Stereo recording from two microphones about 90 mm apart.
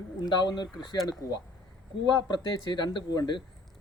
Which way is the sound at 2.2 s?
50° left (ahead or behind).